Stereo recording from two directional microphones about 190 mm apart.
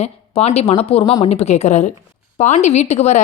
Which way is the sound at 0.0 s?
35° left (ahead or behind).